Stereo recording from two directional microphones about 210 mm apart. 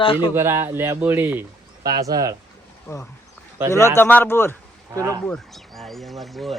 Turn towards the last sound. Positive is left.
turn(degrees=0)  # may be behind; listen again after turning